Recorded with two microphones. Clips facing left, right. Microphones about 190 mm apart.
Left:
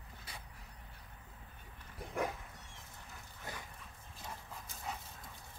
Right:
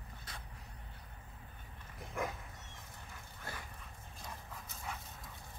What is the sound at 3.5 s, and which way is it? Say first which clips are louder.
Dog: even; 20° left (ahead or behind).